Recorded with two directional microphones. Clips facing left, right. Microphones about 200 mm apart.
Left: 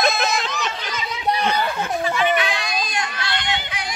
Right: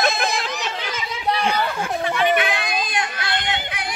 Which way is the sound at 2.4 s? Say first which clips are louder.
Right 1 dB; 55° right (ahead or behind).